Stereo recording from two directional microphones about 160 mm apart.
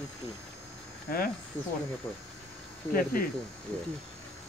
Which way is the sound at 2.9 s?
65° left (ahead or behind).